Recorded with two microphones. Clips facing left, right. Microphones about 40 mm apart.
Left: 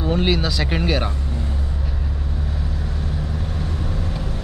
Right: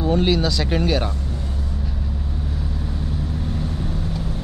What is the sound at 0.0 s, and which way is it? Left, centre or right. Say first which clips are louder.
Speech: right 1 dB; centre.